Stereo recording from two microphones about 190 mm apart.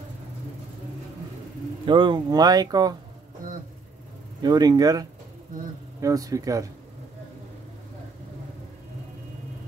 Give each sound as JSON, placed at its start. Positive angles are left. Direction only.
{"t": 1.9, "sound": "speech", "side_deg": -25}
{"t": 4.4, "sound": "speech", "side_deg": -20}